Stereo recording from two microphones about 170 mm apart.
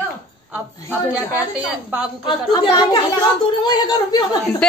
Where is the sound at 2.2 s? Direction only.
25° left (ahead or behind).